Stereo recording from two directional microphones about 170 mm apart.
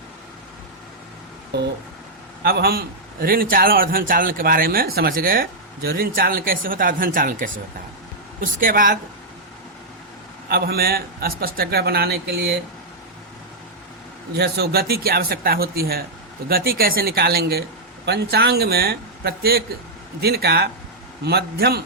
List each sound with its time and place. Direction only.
2.4 s a man's voice: 65° right (ahead or behind)
10.5 s a man's voice: 65° right (ahead or behind)
14.3 s a man's voice: 70° right (ahead or behind)